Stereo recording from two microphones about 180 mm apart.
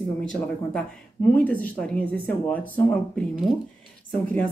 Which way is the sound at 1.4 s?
10° left (ahead or behind).